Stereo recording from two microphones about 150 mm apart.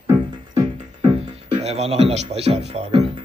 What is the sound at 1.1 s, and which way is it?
Music, 45° right (ahead or behind).